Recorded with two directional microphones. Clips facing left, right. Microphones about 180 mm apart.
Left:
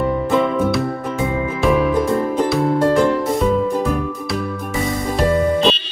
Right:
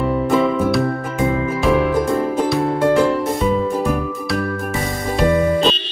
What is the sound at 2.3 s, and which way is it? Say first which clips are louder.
Music: left 1 dB; centre (ahead or behind).